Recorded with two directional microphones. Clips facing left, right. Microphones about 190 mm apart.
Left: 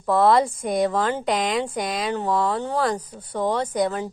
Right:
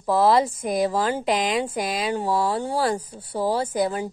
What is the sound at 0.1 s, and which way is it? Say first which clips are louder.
A woman's voice: left 1 dB; 5° right (ahead or behind).